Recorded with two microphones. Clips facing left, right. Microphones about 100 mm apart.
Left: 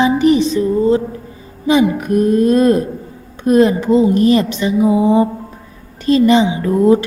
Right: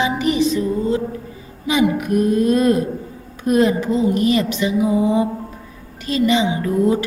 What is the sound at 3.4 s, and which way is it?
Speech, 35° left (ahead or behind).